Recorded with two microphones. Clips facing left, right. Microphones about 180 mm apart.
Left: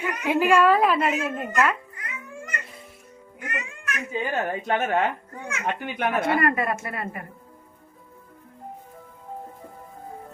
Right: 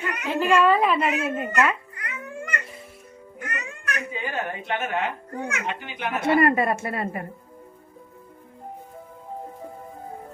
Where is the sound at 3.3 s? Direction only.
45° right (ahead or behind).